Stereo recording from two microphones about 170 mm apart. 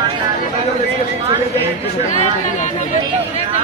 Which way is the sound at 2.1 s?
45° left (ahead or behind).